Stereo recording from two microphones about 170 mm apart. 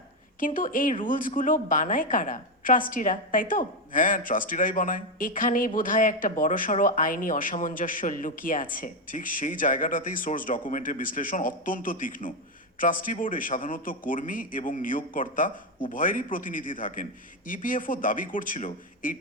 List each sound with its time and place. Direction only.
0.3 s speech: 50° left (ahead or behind)